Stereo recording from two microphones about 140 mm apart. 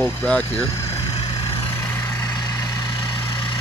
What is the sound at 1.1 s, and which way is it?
Vehicle, 40° left (ahead or behind).